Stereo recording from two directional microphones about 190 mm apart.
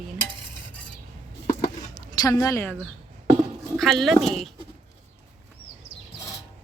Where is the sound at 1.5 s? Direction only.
20° left (ahead or behind).